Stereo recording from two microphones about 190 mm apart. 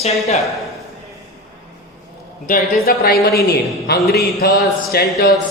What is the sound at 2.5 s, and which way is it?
A woman's voice, 55° left (ahead or behind).